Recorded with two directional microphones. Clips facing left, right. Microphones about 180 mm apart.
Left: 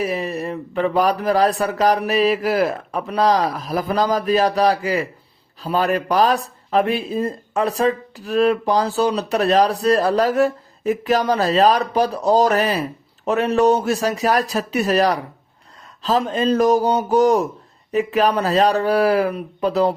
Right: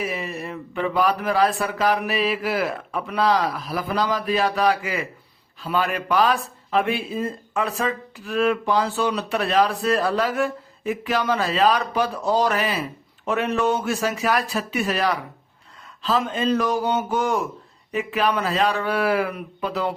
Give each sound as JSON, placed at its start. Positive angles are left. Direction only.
{"t": 0.0, "sound": "speech", "side_deg": 40}